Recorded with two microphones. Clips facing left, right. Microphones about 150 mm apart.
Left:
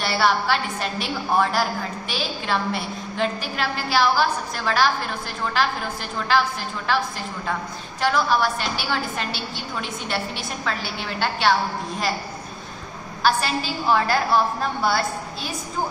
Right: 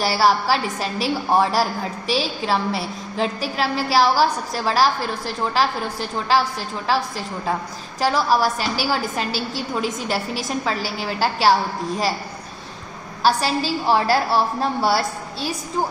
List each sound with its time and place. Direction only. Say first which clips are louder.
0.0 s a woman's voice: right 3 dB; 35° right (ahead or behind)
8.0 s a woman's voice: right 2 dB; 35° right (ahead or behind)
13.2 s a woman's voice: right 3 dB; 35° right (ahead or behind)